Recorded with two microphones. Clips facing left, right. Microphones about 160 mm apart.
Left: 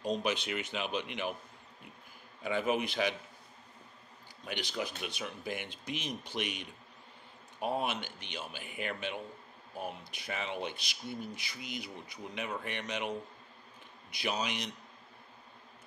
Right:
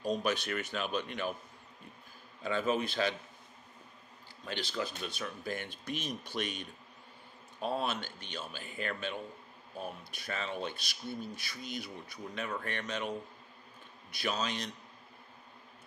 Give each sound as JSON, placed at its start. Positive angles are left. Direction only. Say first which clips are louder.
{"t": 0.0, "sound": "speech", "louder": "right 1 dB", "side_deg": 20}
{"t": 2.4, "sound": "speech", "louder": "even", "side_deg": 15}
{"t": 4.5, "sound": "speech", "louder": "even", "side_deg": 15}
{"t": 14.1, "sound": "speech", "louder": "even", "side_deg": 15}